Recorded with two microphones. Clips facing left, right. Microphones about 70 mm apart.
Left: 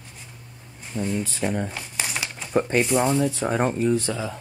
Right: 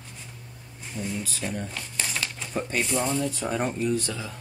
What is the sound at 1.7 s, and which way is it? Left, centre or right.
Crumpling, centre.